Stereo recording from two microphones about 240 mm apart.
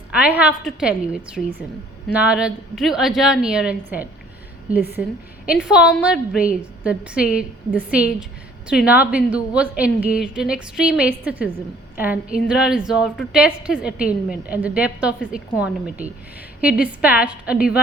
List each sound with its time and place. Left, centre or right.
0.1 s a woman's voice: centre